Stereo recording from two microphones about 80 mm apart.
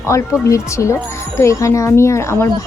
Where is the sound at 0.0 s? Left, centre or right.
Left.